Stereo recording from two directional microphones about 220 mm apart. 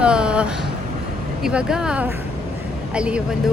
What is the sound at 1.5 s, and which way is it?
Speech, 5° right (ahead or behind).